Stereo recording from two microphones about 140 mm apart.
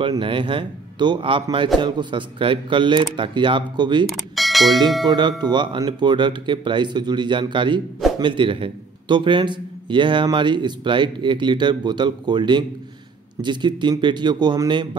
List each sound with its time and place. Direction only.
0.0 s a man's voice: 40° right (ahead or behind)
4.0 s a sound: centre (ahead or behind)
5.0 s a man's voice: 30° right (ahead or behind)